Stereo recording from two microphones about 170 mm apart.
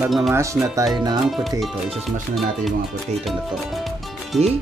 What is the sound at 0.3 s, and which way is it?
Speech, 15° right (ahead or behind).